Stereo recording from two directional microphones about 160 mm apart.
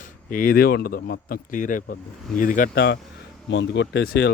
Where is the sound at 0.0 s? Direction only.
60° left (ahead or behind).